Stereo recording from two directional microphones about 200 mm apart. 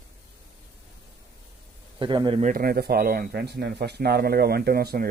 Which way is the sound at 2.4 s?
45° right (ahead or behind).